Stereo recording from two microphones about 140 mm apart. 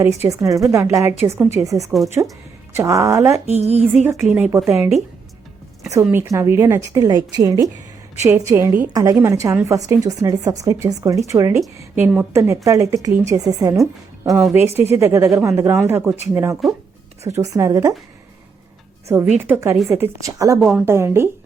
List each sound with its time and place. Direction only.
0.0 s a woman's voice: 20° right (ahead or behind)
3.4 s a woman's voice: 50° right (ahead or behind)
4.2 s a woman's voice: 5° right (ahead or behind)
4.5 s a woman's voice: 20° right (ahead or behind)
5.9 s a woman's voice: 15° right (ahead or behind)
19.0 s a woman's voice: 15° right (ahead or behind)
20.6 s a woman's voice: 5° right (ahead or behind)
20.8 s speech: 20° right (ahead or behind)